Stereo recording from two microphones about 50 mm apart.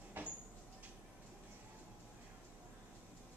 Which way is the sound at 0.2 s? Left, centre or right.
Right.